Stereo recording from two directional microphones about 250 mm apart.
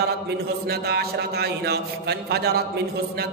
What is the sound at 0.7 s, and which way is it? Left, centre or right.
A man's voice, right.